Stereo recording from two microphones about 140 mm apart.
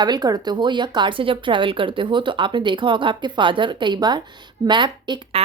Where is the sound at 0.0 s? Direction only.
30° right (ahead or behind).